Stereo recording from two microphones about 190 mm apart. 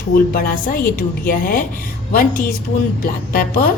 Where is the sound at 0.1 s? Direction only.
50° left (ahead or behind).